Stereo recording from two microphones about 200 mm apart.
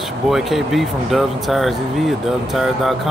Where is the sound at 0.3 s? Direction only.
Centre (ahead or behind).